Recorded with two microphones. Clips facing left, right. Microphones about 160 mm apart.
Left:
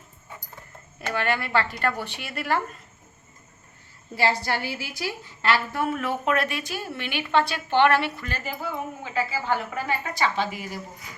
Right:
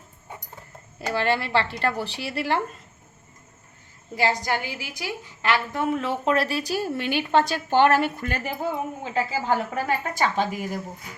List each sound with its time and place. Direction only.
0.9 s a woman's voice: 30° right (ahead or behind)
4.1 s a woman's voice: 15° right (ahead or behind); by 8.4 s 50° right (ahead or behind)
8.4 s a woman's voice: 30° right (ahead or behind); by 10.8 s 45° right (ahead or behind)